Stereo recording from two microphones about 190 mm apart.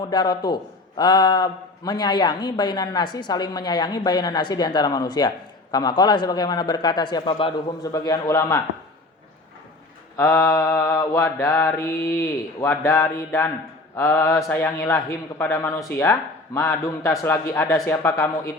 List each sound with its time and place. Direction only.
0.0 s a man's voice: 20° left (ahead or behind)
7.9 s mantra: 20° left (ahead or behind)
10.2 s mantra: 15° left (ahead or behind)